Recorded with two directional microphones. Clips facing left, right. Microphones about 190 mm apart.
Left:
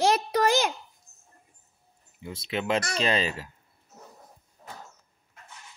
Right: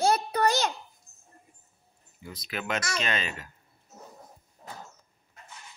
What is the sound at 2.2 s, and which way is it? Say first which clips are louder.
Speech: left 5 dB; 25° left (ahead or behind).